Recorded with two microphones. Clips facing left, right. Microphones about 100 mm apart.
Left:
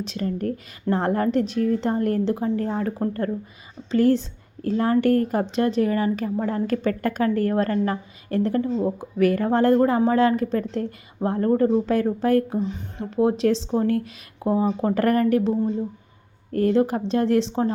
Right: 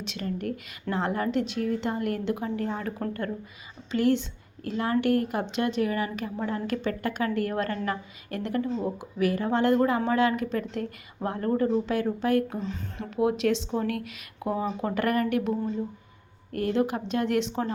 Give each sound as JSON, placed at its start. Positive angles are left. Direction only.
{"t": 0.0, "sound": "speech", "side_deg": 35}
{"t": 12.5, "sound": "speech", "side_deg": 20}
{"t": 13.1, "sound": "speech", "side_deg": 35}